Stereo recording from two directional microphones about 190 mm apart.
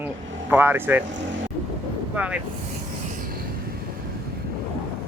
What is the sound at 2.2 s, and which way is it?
Speech, 10° right (ahead or behind).